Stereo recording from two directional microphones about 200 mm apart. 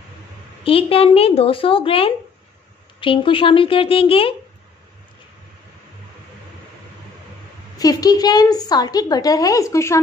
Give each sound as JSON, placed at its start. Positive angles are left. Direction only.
{"t": 0.7, "sound": "a woman's voice", "side_deg": 30}
{"t": 7.7, "sound": "a woman's voice", "side_deg": 20}